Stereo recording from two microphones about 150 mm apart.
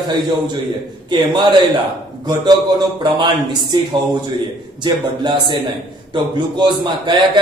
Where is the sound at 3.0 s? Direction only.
30° right (ahead or behind).